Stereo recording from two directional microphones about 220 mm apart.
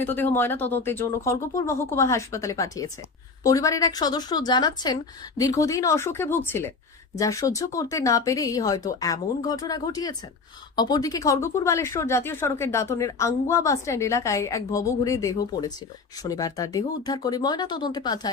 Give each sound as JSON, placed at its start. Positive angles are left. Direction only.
{"t": 0.0, "sound": "speech", "side_deg": 10}